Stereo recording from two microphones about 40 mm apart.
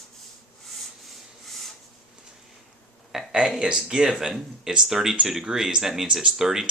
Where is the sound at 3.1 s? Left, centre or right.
Centre.